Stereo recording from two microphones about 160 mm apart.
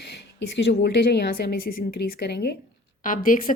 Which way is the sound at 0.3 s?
90° left.